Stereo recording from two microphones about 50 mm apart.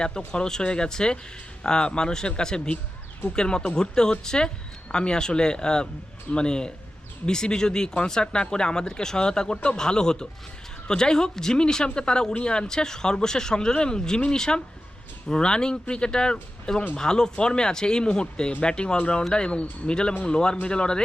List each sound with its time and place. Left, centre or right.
0.3 s speech: centre